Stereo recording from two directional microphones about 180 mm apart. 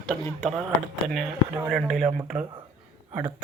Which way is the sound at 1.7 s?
Centre (ahead or behind).